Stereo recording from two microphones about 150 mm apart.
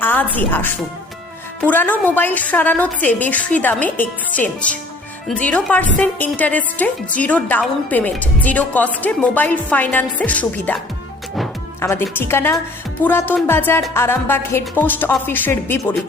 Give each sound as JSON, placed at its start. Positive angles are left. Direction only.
{"t": 0.0, "sound": "a woman's voice", "side_deg": 10}
{"t": 11.8, "sound": "a woman's voice", "side_deg": 15}